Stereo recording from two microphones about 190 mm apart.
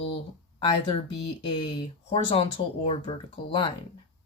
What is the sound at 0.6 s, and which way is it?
Speech, 25° left (ahead or behind).